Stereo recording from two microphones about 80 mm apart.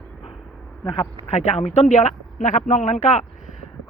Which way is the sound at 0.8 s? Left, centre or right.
Left.